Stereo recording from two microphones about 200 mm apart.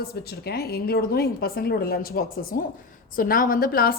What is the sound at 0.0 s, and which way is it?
A woman's voice, 50° left (ahead or behind).